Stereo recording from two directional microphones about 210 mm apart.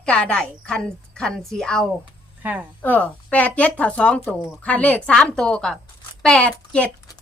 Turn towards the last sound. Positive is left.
turn(degrees=5)  # may be behind; listen again after turning